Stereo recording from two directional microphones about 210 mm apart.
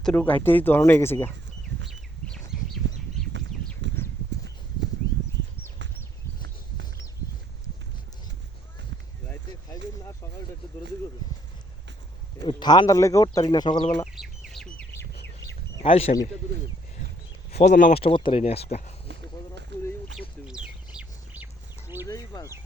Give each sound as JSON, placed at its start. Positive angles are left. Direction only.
{"t": 0.0, "sound": "speech", "side_deg": 5}
{"t": 1.9, "sound": "bird", "side_deg": 0}
{"t": 3.3, "sound": "a sound", "side_deg": -60}
{"t": 12.5, "sound": "speech", "side_deg": 20}
{"t": 14.2, "sound": "bird", "side_deg": 0}
{"t": 15.8, "sound": "speech", "side_deg": 30}
{"t": 17.5, "sound": "speech", "side_deg": 35}
{"t": 19.7, "sound": "a sound", "side_deg": -55}
{"t": 22.0, "sound": "a sound", "side_deg": 15}